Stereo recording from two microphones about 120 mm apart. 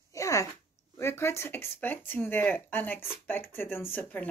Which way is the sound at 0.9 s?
20° left (ahead or behind).